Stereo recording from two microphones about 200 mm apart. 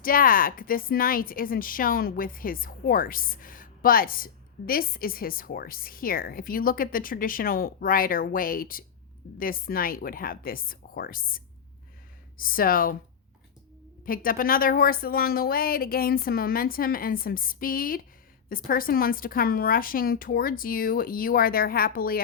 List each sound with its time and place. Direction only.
0.0 s a woman's voice: 45° left (ahead or behind)
14.0 s a woman's voice: 45° left (ahead or behind)